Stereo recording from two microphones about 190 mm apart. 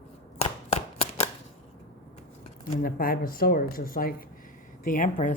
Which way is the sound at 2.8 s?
50° left (ahead or behind).